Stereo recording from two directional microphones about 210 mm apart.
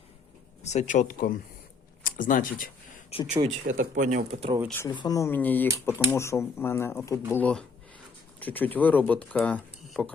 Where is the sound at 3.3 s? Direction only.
35° right (ahead or behind).